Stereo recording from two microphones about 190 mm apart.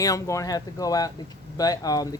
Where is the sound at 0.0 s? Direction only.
15° left (ahead or behind).